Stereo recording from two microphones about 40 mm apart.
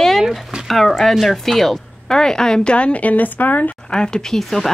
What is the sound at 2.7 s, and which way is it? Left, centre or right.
A woman's voice, left.